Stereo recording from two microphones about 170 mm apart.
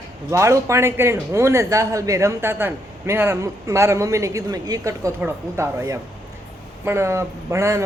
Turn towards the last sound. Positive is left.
turn(degrees=-15)  # may be behind; listen again after turning